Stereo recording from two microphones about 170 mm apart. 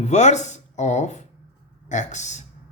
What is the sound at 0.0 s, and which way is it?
Speech, 40° left (ahead or behind).